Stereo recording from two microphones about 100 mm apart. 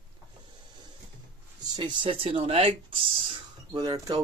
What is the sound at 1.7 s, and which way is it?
Speech, 50° right (ahead or behind).